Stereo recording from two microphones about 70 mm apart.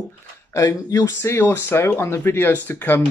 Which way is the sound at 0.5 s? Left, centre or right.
Left.